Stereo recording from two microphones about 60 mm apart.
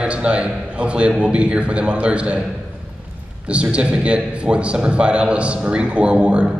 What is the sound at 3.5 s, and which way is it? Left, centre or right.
A man's voice, centre.